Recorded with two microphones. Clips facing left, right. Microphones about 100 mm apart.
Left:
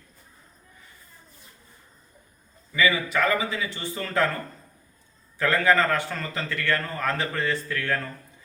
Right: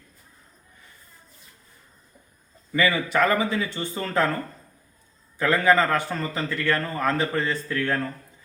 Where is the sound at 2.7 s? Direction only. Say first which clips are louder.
Right 1 dB; 45° right (ahead or behind).